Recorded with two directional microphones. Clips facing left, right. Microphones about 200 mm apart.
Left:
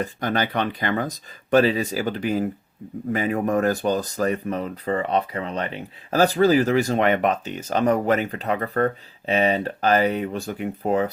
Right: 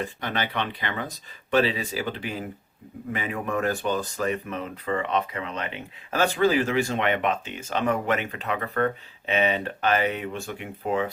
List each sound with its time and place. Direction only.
0.0 s speech: 40° left (ahead or behind)